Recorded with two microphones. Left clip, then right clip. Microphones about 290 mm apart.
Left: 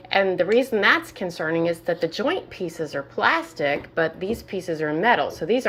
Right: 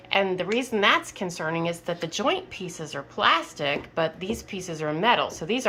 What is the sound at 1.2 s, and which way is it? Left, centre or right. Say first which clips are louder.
Speech: left 3 dB; centre.